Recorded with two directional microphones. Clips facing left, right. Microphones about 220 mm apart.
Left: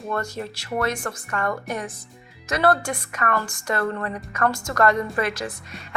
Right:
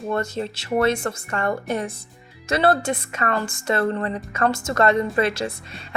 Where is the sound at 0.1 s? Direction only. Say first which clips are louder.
Right 3 dB; 25° right (ahead or behind).